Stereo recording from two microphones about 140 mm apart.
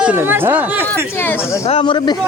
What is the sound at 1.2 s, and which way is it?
Speech, 15° left (ahead or behind).